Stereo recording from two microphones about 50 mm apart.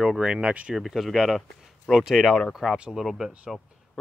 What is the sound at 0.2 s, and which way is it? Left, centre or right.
Speech, centre.